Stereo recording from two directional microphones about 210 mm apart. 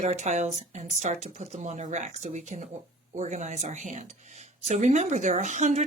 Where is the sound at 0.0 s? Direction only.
35° right (ahead or behind).